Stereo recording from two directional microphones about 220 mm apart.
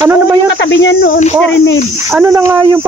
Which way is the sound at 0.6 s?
55° left (ahead or behind).